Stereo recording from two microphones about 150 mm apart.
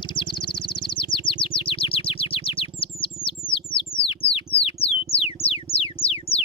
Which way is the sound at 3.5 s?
35° left (ahead or behind).